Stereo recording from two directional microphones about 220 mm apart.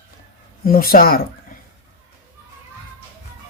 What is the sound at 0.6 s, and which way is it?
Speech, 40° left (ahead or behind).